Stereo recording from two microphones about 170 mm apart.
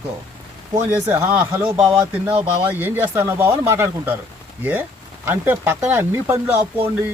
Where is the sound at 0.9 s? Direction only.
10° right (ahead or behind).